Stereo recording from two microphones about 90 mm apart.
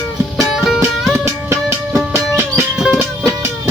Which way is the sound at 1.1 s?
30° right (ahead or behind).